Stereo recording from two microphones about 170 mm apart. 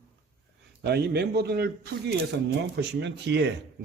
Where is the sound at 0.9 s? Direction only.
75° right (ahead or behind).